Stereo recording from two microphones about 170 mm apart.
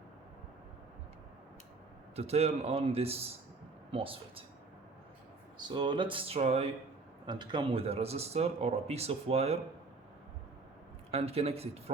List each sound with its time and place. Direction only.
2.1 s speech: 40° right (ahead or behind)
5.5 s speech: 25° right (ahead or behind)
7.3 s speech: 25° right (ahead or behind)
11.1 s speech: 35° right (ahead or behind)